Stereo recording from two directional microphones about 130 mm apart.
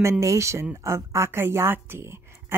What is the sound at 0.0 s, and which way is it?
A woman's voice, 25° right (ahead or behind).